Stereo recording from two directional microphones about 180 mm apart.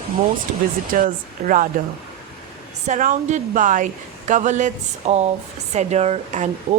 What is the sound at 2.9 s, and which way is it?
Speech, 45° right (ahead or behind).